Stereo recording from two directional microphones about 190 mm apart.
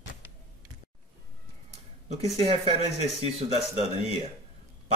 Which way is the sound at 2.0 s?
35° right (ahead or behind).